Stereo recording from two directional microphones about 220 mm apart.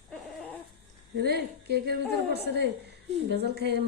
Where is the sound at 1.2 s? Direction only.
50° right (ahead or behind).